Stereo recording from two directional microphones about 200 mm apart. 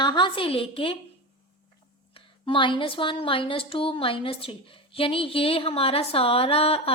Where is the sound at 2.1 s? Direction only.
25° left (ahead or behind).